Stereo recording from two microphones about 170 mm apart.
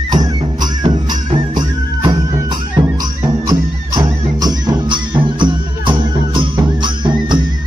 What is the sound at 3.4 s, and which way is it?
Music, 20° right (ahead or behind).